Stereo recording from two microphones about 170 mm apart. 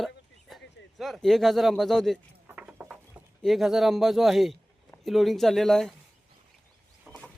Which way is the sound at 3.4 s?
Centre (ahead or behind).